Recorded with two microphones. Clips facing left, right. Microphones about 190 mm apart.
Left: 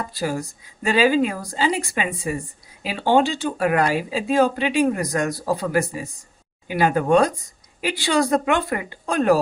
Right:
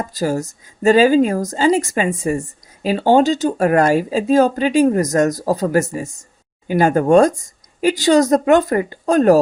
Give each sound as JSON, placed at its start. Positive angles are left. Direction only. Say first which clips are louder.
{"t": 0.0, "sound": "a woman's voice", "louder": "right 5 dB", "side_deg": -45}